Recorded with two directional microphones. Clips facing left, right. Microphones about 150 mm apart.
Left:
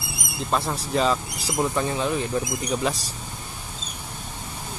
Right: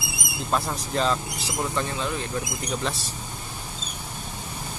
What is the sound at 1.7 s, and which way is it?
Speech, 15° left (ahead or behind).